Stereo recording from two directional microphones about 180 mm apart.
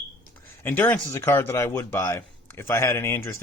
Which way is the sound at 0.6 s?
10° left (ahead or behind).